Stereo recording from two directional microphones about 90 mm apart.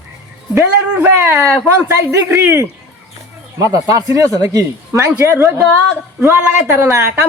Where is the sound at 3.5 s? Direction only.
40° right (ahead or behind).